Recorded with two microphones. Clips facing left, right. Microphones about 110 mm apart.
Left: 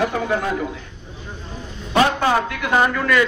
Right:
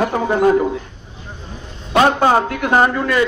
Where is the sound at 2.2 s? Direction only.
35° right (ahead or behind).